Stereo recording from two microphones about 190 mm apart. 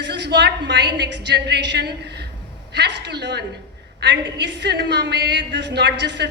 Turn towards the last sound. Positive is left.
turn(degrees=-65)  # may be behind; listen again after turning